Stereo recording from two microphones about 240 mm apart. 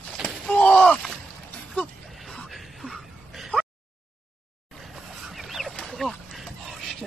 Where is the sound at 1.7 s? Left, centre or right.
Centre.